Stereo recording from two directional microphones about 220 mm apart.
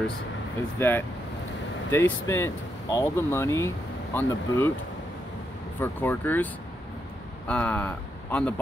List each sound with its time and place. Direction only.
0.7 s speech: 10° left (ahead or behind)
5.8 s speech: 10° left (ahead or behind)